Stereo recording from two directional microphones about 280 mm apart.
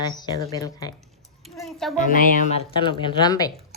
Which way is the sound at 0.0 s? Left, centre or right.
Centre.